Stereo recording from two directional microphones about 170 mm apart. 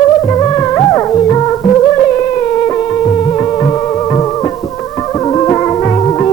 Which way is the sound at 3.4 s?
20° left (ahead or behind).